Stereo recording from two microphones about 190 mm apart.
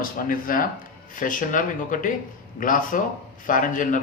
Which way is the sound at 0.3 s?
45° left (ahead or behind).